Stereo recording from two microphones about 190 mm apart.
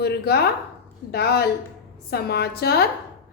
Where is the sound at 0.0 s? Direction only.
60° left (ahead or behind).